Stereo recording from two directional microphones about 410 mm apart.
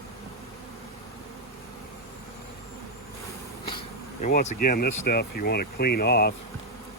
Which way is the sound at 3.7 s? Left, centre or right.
Centre.